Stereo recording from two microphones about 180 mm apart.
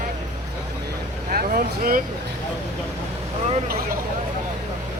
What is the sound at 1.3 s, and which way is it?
Vehicle, 50° right (ahead or behind).